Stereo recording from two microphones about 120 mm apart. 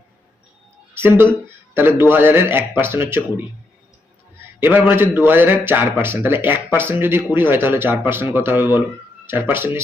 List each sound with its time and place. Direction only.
0.9 s a man's voice: 20° right (ahead or behind)
4.6 s a man's voice: 15° right (ahead or behind)